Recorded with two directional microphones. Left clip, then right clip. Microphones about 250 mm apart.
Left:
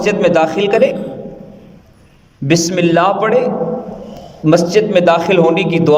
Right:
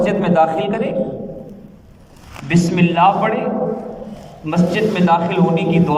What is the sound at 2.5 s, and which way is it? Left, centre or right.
A man's voice, left.